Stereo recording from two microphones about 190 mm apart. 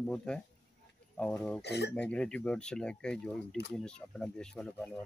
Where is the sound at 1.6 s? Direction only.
60° left (ahead or behind).